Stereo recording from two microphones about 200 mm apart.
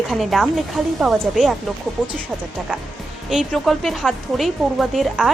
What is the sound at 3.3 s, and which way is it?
Speech, centre (ahead or behind).